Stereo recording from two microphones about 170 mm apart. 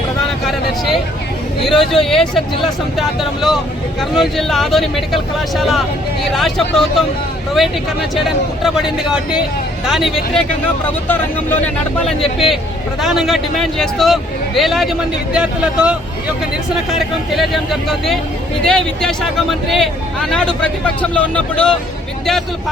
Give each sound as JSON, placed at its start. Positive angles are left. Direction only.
{"t": 1.6, "sound": "speech", "side_deg": 0}
{"t": 8.1, "sound": "speech", "side_deg": 0}
{"t": 11.1, "sound": "speech", "side_deg": 10}
{"t": 12.0, "sound": "speech", "side_deg": 0}
{"t": 17.3, "sound": "speech", "side_deg": 0}